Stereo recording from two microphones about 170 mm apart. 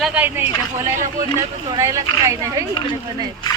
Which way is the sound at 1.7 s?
20° right (ahead or behind).